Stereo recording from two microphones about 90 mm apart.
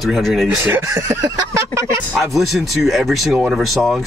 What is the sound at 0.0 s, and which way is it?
Speech, centre (ahead or behind).